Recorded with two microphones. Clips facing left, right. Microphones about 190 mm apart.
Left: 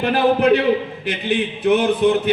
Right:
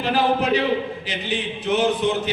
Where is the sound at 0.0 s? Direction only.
60° left (ahead or behind).